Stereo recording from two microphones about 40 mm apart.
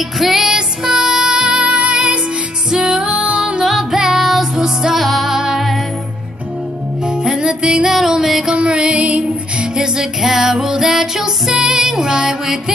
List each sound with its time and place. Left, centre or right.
0.2 s music: centre; by 2.1 s right
2.7 s music: centre
3.9 s music: centre
4.2 s music: centre
5.0 s music: centre
5.3 s music: centre
7.1 s music: centre
7.9 s music: centre
8.5 s music: right
9.9 s music: centre